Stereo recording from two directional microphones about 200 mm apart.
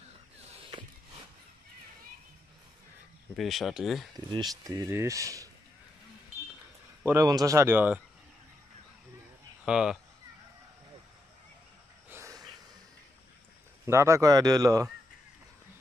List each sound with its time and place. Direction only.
0.5 s a sound: 25° right (ahead or behind)
3.3 s speech: centre (ahead or behind)
4.3 s speech: 20° right (ahead or behind)
7.0 s speech: 15° right (ahead or behind)
9.7 s speech: 5° right (ahead or behind)
12.1 s a sound: 15° right (ahead or behind)
13.8 s speech: 15° right (ahead or behind)